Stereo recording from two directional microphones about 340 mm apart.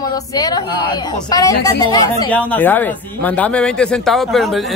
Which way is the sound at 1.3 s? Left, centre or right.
Centre.